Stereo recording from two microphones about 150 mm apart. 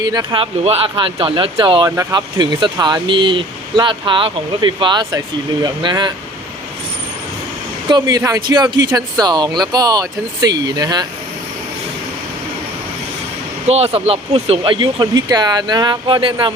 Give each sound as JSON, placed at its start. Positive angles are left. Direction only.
{"t": 0.0, "sound": "speech", "side_deg": -25}
{"t": 0.6, "sound": "speech", "side_deg": -40}
{"t": 7.9, "sound": "speech", "side_deg": -25}
{"t": 13.7, "sound": "speech", "side_deg": -45}